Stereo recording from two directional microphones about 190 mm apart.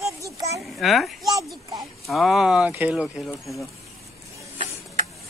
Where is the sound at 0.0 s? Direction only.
15° right (ahead or behind).